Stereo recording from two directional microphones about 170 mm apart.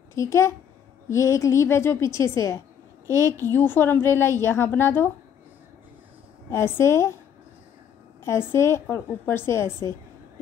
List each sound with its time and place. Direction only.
0.1 s a woman's voice: 15° left (ahead or behind)
6.5 s a woman's voice: 15° left (ahead or behind)
8.2 s a woman's voice: 15° left (ahead or behind)